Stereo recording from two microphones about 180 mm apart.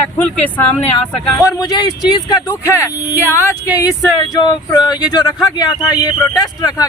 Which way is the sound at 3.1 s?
10° right (ahead or behind).